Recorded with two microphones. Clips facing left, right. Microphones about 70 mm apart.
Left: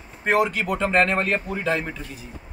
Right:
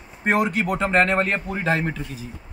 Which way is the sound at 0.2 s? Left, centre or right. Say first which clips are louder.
Even; right.